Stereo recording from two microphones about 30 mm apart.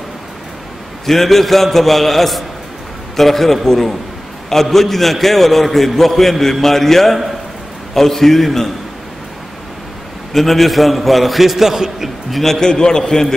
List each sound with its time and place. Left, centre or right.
1.0 s a man's voice: centre
10.3 s a man's voice: centre
12.3 s a man's voice: centre
12.5 s a man's voice: left